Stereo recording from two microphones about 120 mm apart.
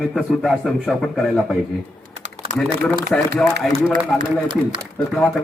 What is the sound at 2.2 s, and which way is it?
Typing, 80° right.